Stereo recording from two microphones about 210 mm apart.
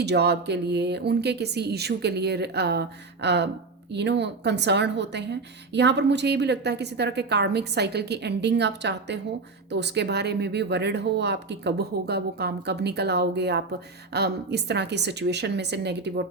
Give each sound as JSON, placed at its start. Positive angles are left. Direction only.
{"t": 0.0, "sound": "a woman's voice", "side_deg": -50}